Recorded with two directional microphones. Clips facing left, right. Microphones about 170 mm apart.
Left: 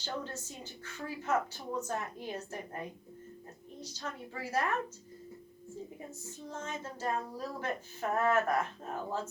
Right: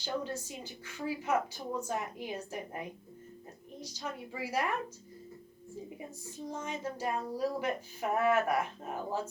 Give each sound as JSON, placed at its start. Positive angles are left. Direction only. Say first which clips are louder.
{"t": 0.0, "sound": "speech", "louder": "right 3 dB", "side_deg": -10}
{"t": 3.8, "sound": "speech", "louder": "right 2 dB", "side_deg": -10}
{"t": 6.3, "sound": "speech", "louder": "right 3 dB", "side_deg": -10}